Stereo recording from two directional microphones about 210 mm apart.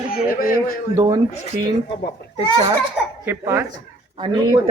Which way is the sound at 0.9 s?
20° right (ahead or behind).